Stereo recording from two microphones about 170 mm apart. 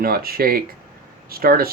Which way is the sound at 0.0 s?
60° right (ahead or behind).